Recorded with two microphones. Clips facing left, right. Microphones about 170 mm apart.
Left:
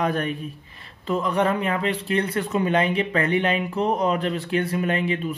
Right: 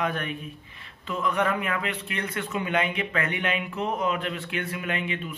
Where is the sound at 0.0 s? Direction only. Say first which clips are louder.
Left 5 dB; 35° left (ahead or behind).